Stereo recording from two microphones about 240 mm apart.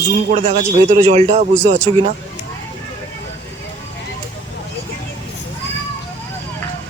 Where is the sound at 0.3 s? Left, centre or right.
Right.